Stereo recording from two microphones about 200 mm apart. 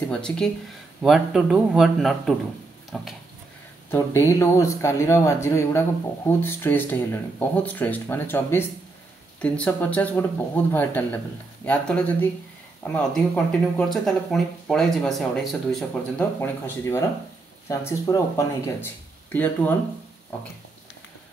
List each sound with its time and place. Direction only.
0.1 s speech: 5° left (ahead or behind)
3.9 s speech: 15° left (ahead or behind)